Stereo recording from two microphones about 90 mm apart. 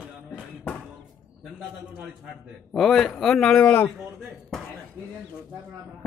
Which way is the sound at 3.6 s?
20° left (ahead or behind).